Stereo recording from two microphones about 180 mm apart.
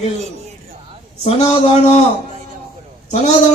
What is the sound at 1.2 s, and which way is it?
Speech, 35° left (ahead or behind).